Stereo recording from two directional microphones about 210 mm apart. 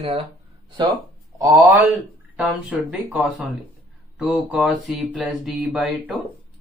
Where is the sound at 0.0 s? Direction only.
25° right (ahead or behind).